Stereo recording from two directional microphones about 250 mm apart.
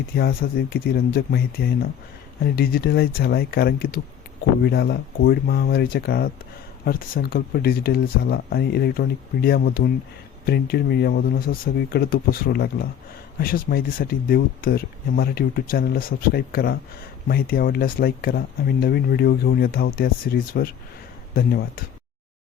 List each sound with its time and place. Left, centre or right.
0.2 s speech: left